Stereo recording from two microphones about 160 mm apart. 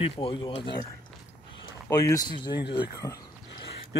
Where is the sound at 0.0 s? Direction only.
35° left (ahead or behind).